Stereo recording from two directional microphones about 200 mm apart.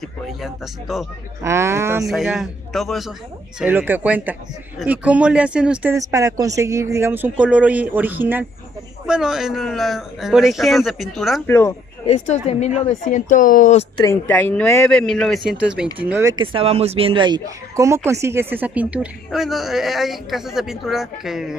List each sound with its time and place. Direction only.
0.4 s speech: centre (ahead or behind)
1.4 s speech: 15° right (ahead or behind)
2.0 s speech: centre (ahead or behind)
11.4 s a man's voice: 15° left (ahead or behind)
12.3 s a woman's voice: 35° left (ahead or behind)
13.9 s speech: 15° left (ahead or behind); by 21.5 s centre (ahead or behind)